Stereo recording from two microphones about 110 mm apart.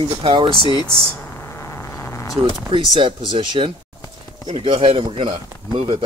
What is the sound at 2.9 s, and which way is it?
A man's voice, 50° right (ahead or behind).